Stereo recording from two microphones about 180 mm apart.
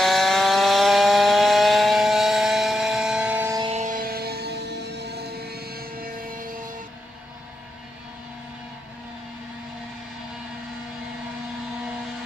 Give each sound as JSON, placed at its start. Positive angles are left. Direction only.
{"t": 0.0, "sound": "chainsaw", "side_deg": 0}
{"t": 3.7, "sound": "music", "side_deg": -45}